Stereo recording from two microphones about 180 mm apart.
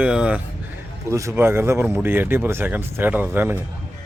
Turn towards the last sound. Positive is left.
turn(degrees=-10)  # may be behind; listen again after turning